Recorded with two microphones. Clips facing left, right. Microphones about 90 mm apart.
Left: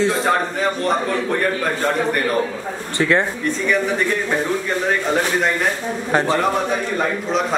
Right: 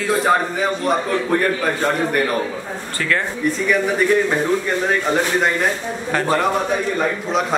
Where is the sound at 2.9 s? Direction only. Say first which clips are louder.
Left 4 dB; 20° left (ahead or behind).